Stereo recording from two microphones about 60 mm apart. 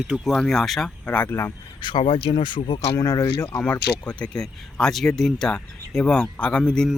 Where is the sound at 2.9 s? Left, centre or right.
Left.